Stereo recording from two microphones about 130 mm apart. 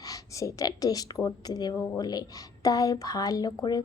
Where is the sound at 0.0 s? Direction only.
25° left (ahead or behind).